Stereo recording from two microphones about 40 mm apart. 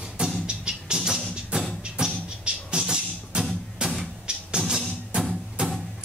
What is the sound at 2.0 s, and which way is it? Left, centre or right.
Music, right.